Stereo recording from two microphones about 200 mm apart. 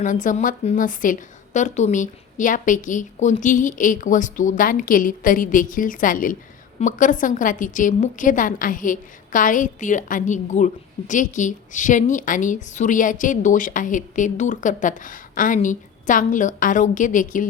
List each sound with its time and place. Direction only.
0.0 s a woman's voice: 40° left (ahead or behind)